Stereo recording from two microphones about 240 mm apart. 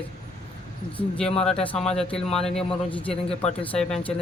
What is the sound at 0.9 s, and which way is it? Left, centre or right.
Speech, centre.